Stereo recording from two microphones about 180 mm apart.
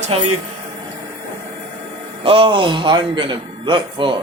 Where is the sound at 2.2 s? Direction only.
30° right (ahead or behind).